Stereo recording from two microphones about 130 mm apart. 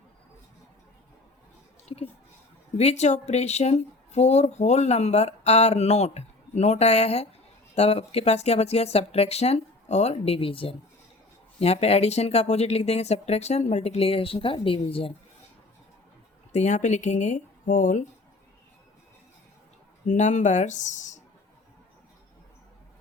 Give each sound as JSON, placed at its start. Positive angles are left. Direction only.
{"t": 1.9, "sound": "speech", "side_deg": 40}
{"t": 2.7, "sound": "speech", "side_deg": 60}
{"t": 16.5, "sound": "speech", "side_deg": 65}
{"t": 20.1, "sound": "speech", "side_deg": 70}